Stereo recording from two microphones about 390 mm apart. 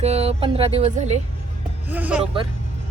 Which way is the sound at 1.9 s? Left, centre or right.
Centre.